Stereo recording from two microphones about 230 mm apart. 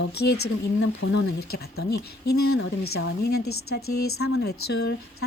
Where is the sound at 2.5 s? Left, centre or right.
Left.